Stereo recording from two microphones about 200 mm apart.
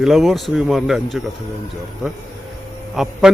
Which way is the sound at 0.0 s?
Centre (ahead or behind).